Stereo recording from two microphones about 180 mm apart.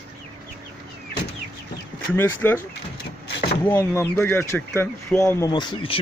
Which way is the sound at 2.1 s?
10° left (ahead or behind).